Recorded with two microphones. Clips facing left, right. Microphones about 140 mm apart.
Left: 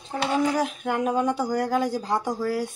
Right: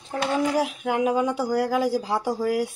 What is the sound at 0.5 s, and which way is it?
Speech, 5° right (ahead or behind).